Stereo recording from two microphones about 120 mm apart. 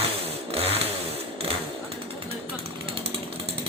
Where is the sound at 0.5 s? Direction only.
55° right (ahead or behind).